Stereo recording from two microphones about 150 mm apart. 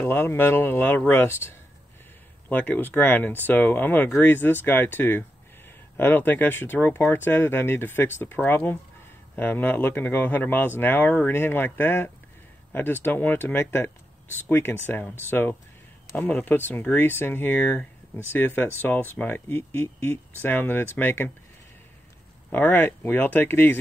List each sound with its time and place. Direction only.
0.0 s speech: 15° left (ahead or behind)
2.5 s speech: 15° left (ahead or behind)
22.5 s speech: 10° left (ahead or behind)